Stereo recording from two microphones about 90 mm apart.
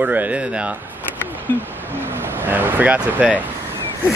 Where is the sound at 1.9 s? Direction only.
25° right (ahead or behind).